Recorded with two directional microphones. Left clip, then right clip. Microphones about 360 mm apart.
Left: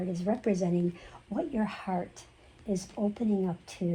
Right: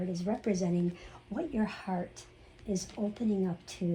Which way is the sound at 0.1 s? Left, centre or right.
Left.